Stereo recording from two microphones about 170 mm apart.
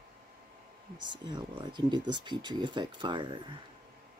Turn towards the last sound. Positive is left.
turn(degrees=-30)  # may be behind; listen again after turning